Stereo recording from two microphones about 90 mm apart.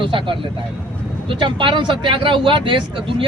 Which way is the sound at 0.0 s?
65° right (ahead or behind).